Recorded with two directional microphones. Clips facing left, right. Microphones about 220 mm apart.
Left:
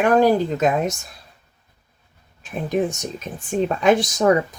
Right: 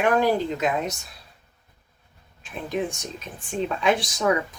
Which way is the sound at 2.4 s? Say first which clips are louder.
Left 6 dB; 45° left (ahead or behind).